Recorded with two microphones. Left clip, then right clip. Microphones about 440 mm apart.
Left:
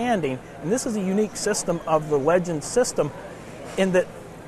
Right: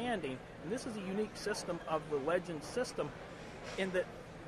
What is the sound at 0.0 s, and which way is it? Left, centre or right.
Speech, left.